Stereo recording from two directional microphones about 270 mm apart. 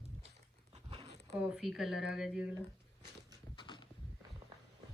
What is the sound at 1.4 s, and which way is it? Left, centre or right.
Speech, centre.